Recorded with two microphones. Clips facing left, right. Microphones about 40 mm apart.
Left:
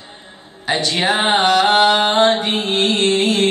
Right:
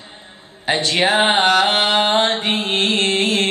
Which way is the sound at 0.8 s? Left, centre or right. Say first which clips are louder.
Right 2 dB; centre.